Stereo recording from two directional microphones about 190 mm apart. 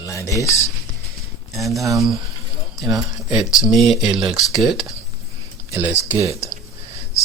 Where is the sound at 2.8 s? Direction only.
20° right (ahead or behind).